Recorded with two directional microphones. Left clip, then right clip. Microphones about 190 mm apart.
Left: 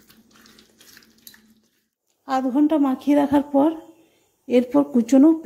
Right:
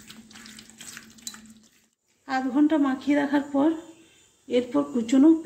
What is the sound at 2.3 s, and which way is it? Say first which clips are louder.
A woman's voice: left 3 dB; 35° left (ahead or behind).